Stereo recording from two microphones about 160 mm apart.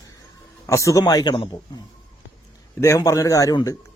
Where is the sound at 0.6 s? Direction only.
20° left (ahead or behind).